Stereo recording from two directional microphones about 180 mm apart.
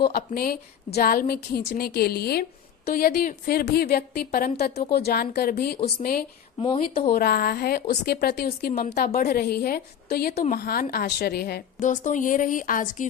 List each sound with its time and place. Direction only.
0.1 s a woman's voice: 55° left (ahead or behind)